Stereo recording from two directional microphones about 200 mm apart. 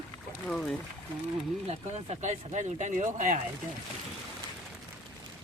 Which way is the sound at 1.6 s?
30° right (ahead or behind).